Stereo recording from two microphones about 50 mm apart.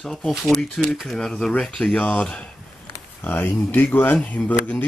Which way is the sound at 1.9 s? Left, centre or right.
Left.